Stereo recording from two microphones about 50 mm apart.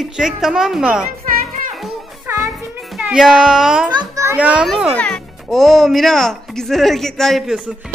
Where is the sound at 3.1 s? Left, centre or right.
Centre.